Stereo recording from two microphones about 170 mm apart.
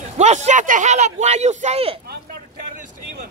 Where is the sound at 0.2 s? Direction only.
45° right (ahead or behind).